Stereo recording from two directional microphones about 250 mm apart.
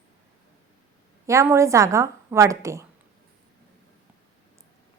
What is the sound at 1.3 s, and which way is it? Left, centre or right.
A woman's voice, centre.